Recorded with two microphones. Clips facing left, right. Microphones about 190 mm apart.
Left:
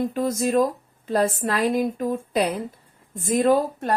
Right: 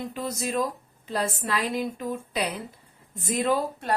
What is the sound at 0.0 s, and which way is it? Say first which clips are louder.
Speech: left 8 dB; 45° left (ahead or behind).